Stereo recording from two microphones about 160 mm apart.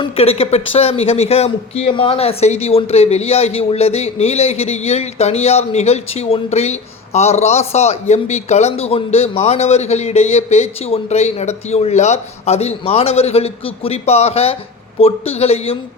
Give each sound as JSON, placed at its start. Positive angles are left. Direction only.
{"t": 0.0, "sound": "speech", "side_deg": 40}